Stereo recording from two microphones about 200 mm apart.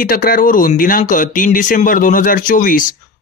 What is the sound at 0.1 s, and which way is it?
Speech, 45° left (ahead or behind).